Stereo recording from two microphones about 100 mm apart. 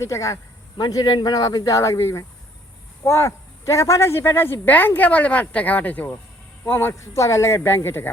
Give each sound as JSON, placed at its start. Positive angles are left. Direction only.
{"t": 0.0, "sound": "speech", "side_deg": 30}